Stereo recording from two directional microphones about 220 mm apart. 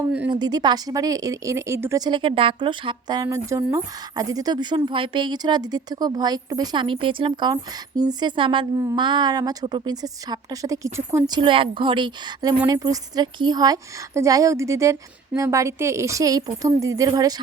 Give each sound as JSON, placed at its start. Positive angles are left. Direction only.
{"t": 0.3, "sound": "a woman's voice", "side_deg": -20}